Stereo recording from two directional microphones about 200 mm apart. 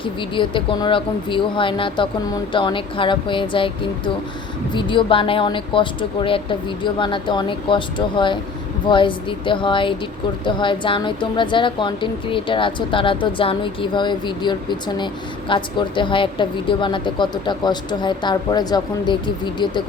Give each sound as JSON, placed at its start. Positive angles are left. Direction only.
{"t": 0.0, "sound": "speech", "side_deg": 25}